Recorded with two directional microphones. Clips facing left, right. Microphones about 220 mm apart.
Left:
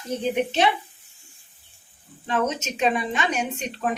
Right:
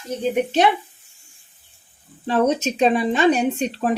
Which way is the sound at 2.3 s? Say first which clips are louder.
Right 6 dB; 35° right (ahead or behind).